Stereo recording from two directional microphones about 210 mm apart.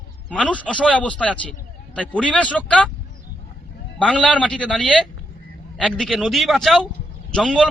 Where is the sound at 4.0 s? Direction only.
5° left (ahead or behind).